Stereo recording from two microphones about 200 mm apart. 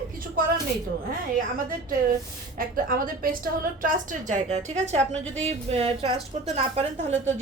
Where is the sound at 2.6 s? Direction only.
45° right (ahead or behind).